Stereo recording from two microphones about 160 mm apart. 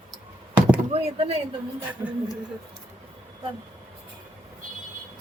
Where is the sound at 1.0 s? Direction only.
40° right (ahead or behind).